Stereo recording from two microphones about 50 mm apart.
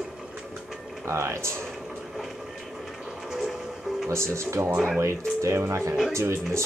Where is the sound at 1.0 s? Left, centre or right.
Right.